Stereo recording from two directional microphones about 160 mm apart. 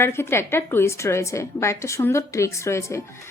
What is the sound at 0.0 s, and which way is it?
Speech, 15° left (ahead or behind).